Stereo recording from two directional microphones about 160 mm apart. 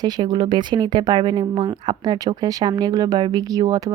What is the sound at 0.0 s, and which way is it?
A woman's voice, 25° right (ahead or behind).